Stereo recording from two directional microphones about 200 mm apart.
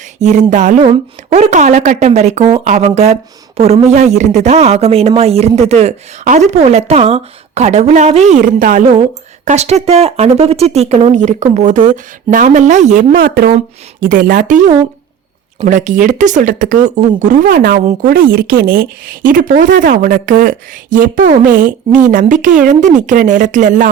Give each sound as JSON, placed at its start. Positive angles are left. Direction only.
{"t": 0.2, "sound": "a woman's voice", "side_deg": -35}